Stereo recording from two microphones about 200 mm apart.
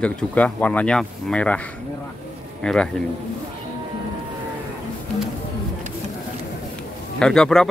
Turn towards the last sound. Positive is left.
turn(degrees=5)  # may be behind; listen again after turning